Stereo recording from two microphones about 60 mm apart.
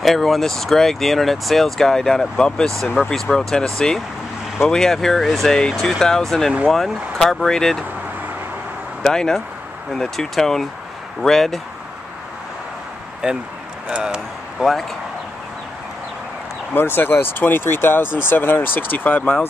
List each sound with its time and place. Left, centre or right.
0.0 s speech: centre
9.0 s speech: centre
13.2 s speech: centre
13.8 s a sound: centre
16.7 s speech: left